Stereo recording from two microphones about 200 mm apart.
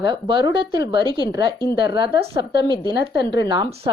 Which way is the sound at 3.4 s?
20° right (ahead or behind).